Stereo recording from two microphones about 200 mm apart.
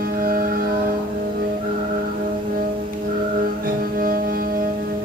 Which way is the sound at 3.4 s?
45° right (ahead or behind).